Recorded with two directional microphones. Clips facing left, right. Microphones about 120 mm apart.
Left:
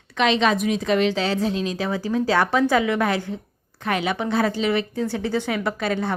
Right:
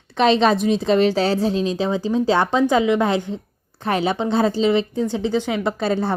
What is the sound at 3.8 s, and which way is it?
A woman's voice, 30° right (ahead or behind).